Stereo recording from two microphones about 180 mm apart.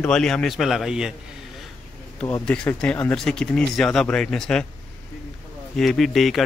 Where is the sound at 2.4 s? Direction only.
5° left (ahead or behind).